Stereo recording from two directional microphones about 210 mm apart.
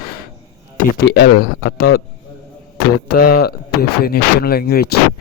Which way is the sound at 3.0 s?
45° left (ahead or behind).